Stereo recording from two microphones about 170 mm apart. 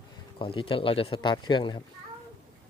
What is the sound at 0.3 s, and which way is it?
Speech, 30° left (ahead or behind).